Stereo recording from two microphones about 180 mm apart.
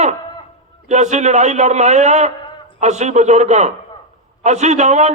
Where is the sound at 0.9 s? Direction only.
40° right (ahead or behind).